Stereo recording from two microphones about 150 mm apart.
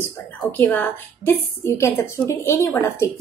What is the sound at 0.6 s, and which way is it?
A woman's voice, 10° left (ahead or behind).